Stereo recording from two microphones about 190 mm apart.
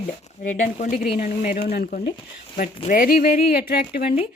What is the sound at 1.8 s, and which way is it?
Speech, 55° left (ahead or behind).